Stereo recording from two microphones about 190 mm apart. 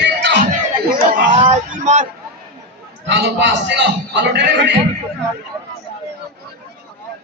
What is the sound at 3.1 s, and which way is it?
A man's voice, 70° right (ahead or behind).